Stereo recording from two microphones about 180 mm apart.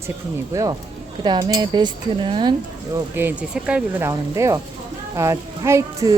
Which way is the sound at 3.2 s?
10° right (ahead or behind).